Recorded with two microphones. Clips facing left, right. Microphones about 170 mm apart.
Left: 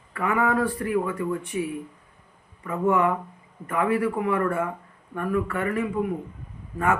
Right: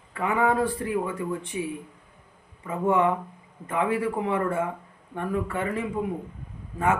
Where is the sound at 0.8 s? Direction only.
25° right (ahead or behind).